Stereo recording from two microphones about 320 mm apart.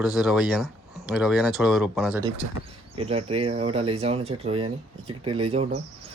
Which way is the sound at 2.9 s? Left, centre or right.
Centre.